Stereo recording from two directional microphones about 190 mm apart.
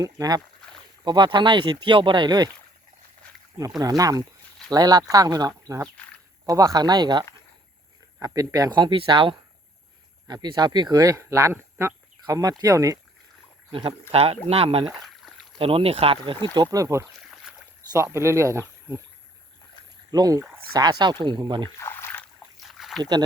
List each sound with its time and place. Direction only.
0.0 s speech: 20° right (ahead or behind)
3.8 s speech: 20° right (ahead or behind)
13.7 s speech: 30° right (ahead or behind)
15.0 s rowboat: centre (ahead or behind)
15.5 s speech: 30° right (ahead or behind); by 18.6 s 15° right (ahead or behind)
20.1 s speech: 20° right (ahead or behind)
21.8 s a sound: 15° left (ahead or behind)
22.6 s a sound: centre (ahead or behind)